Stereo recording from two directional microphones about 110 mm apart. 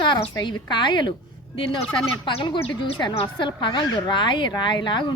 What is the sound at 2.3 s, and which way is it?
Speech, 45° left (ahead or behind).